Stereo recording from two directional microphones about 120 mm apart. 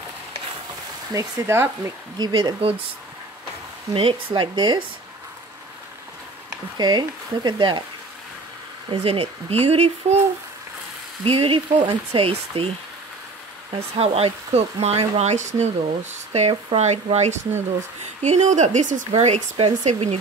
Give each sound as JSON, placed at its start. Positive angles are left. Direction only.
{"t": 1.1, "sound": "speech", "side_deg": -25}
{"t": 2.1, "sound": "speech", "side_deg": -35}
{"t": 3.9, "sound": "speech", "side_deg": -50}
{"t": 6.8, "sound": "speech", "side_deg": -35}
{"t": 8.9, "sound": "speech", "side_deg": -55}
{"t": 11.2, "sound": "speech", "side_deg": -50}
{"t": 13.7, "sound": "speech", "side_deg": -55}